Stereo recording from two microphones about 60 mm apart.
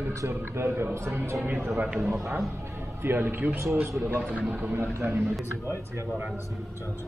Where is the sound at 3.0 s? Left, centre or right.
Right.